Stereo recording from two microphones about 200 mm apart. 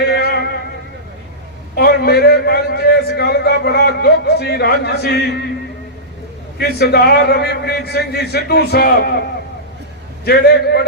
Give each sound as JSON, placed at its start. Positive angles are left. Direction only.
{"t": 0.0, "sound": "music", "side_deg": 55}
{"t": 1.7, "sound": "a sound", "side_deg": 55}
{"t": 6.6, "sound": "a man's voice", "side_deg": 55}
{"t": 10.2, "sound": "a man's voice", "side_deg": 55}